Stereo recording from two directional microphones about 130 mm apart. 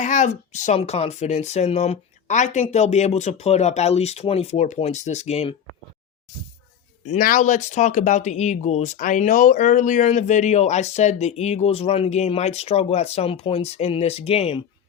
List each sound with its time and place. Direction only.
0.0 s speech: 70° left (ahead or behind)
0.8 s speech: 50° left (ahead or behind)
7.0 s speech: 75° left (ahead or behind); by 14.6 s 50° left (ahead or behind)